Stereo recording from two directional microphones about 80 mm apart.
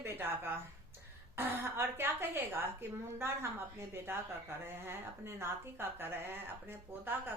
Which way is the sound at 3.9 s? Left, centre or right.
Right.